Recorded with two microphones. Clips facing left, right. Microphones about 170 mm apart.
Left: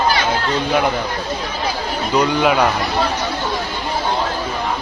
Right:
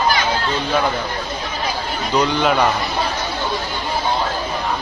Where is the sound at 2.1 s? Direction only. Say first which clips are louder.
Left 1 dB; 10° left (ahead or behind).